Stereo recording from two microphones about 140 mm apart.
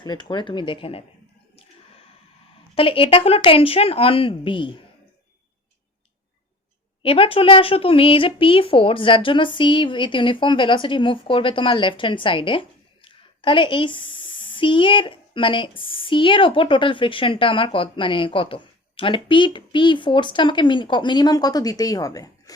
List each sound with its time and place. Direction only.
0.0 s speech: 30° left (ahead or behind)
2.7 s speech: 40° left (ahead or behind)
7.0 s speech: 40° left (ahead or behind); by 22.5 s 25° left (ahead or behind)